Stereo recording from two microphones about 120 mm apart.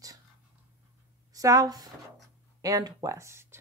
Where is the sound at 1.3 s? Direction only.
30° right (ahead or behind).